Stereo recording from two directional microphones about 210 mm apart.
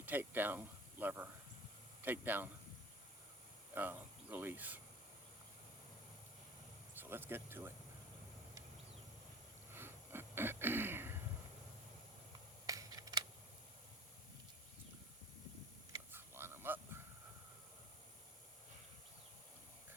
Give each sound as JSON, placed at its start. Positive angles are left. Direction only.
{"t": 0.0, "sound": "speech", "side_deg": -10}
{"t": 3.8, "sound": "speech", "side_deg": -10}
{"t": 6.9, "sound": "speech", "side_deg": -10}
{"t": 9.7, "sound": "a sound", "side_deg": -10}
{"t": 12.6, "sound": "scissors", "side_deg": -15}
{"t": 15.9, "sound": "a sound", "side_deg": -10}